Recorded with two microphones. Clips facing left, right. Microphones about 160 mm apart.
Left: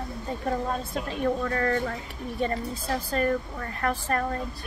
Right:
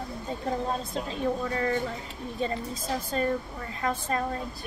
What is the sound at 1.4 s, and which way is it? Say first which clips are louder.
Speech: left 2 dB; 10° right (ahead or behind).